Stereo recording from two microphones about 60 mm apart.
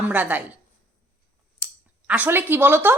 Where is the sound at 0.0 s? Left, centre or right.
Right.